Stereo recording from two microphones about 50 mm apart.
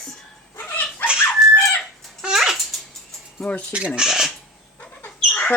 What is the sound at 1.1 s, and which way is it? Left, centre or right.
Dog, centre.